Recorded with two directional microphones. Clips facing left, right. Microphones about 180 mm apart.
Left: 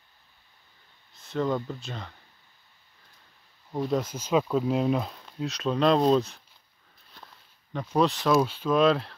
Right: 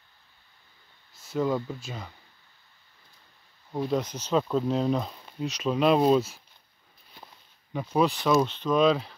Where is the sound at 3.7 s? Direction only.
Centre (ahead or behind).